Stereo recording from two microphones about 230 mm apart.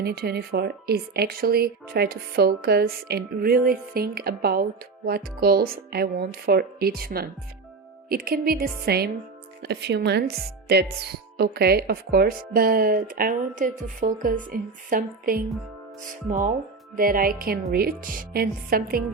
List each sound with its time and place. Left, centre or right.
0.0 s speech: right
17.0 s speech: right